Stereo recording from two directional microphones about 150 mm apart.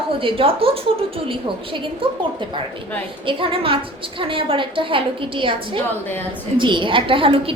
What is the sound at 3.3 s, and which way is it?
A woman's voice, 35° right (ahead or behind).